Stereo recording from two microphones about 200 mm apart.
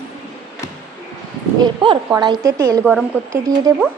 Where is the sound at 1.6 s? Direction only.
25° right (ahead or behind); by 3.4 s 5° right (ahead or behind).